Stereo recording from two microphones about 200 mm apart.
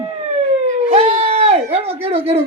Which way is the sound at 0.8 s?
30° right (ahead or behind).